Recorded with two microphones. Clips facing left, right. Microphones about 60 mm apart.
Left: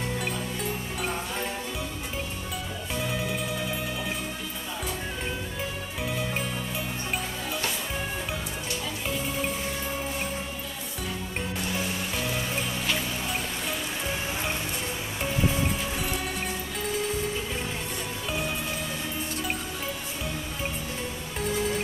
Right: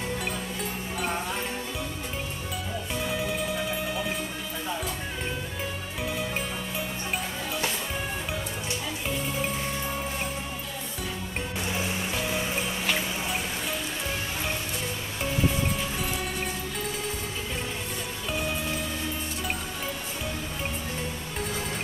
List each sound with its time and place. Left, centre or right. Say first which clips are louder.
0.2 s music: left 1 dB; centre
2.9 s music: even; centre
6.0 s music: even; centre
9.0 s music: even; centre
11.7 s music: right 1 dB; centre
12.1 s music: right 1 dB; centre
20.2 s music: left 1 dB; centre